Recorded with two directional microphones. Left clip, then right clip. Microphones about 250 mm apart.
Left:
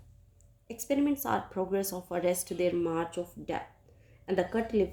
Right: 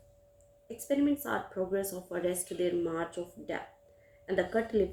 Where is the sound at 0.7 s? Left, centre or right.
Left.